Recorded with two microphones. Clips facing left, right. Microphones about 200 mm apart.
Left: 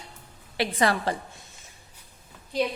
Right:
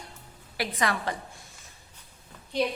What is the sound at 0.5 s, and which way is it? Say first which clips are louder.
Speech: left 4 dB; 30° left (ahead or behind).